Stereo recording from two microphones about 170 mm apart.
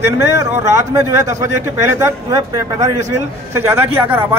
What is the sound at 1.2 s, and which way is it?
A man's voice, 15° right (ahead or behind).